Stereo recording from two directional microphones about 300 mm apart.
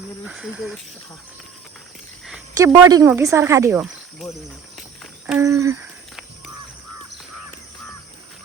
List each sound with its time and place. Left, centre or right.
0.3 s speech: centre
2.2 s speech: centre